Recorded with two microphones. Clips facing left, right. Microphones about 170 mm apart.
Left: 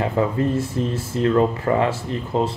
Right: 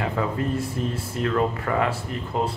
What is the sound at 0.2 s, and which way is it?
Speech, 35° left (ahead or behind).